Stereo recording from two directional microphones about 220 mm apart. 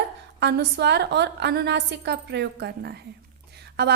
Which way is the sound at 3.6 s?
50° right (ahead or behind).